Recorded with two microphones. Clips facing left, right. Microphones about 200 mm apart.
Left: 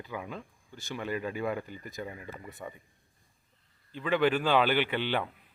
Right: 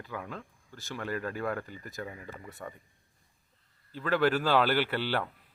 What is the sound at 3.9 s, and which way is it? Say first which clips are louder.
Speech: even; 15° left (ahead or behind).